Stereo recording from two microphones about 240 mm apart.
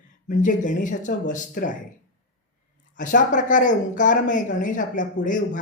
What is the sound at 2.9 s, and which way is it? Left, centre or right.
Speech, left.